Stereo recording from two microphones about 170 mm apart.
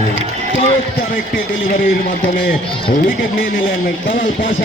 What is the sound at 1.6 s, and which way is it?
Speech, 60° left (ahead or behind).